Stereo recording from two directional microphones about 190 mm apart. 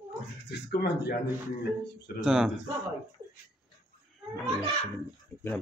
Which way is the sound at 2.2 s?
5° right (ahead or behind).